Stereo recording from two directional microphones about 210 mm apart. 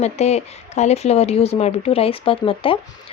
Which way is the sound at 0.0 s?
30° left (ahead or behind).